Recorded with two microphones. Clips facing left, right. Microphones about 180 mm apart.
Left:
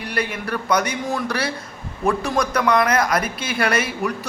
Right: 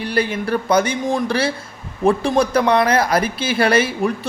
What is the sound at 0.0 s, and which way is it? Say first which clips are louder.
Speech: right 5 dB; 30° right (ahead or behind).